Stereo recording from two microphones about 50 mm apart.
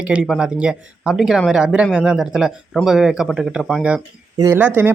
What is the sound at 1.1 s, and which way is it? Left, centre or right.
Speech, centre.